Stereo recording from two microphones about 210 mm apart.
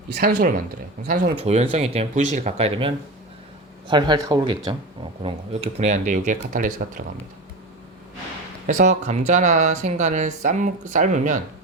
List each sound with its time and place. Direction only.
0.1 s speech: 50° right (ahead or behind)
1.4 s speech: 30° right (ahead or behind)
8.6 s speech: 35° right (ahead or behind)